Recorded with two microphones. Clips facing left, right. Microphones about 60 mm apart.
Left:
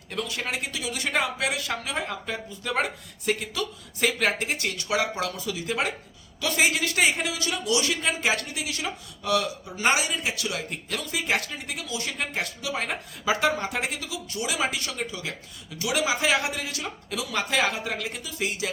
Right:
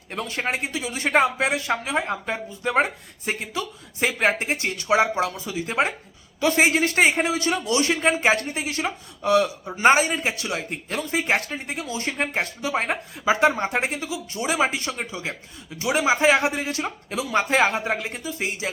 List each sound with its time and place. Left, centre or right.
0.1 s speech: right